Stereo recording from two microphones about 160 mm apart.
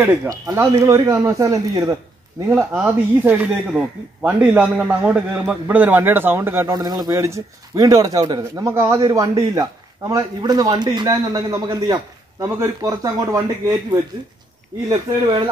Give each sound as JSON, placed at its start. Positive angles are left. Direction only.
{"t": 0.0, "sound": "a man's voice", "side_deg": -15}
{"t": 6.7, "sound": "a man's voice", "side_deg": -25}